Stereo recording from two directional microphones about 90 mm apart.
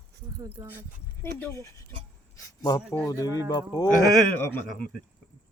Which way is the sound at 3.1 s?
40° left (ahead or behind).